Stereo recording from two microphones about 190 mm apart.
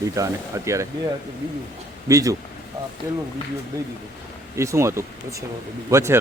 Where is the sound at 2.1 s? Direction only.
20° right (ahead or behind).